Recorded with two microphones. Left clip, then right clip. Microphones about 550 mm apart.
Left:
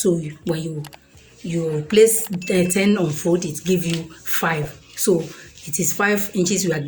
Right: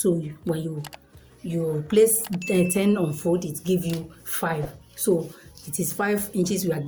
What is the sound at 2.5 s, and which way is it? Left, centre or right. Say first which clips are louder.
Speech: left 4 dB; right.